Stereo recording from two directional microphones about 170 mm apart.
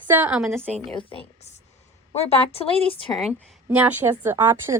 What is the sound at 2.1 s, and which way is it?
A woman's voice, 40° left (ahead or behind).